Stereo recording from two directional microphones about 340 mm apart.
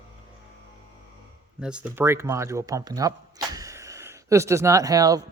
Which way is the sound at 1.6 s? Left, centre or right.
Centre.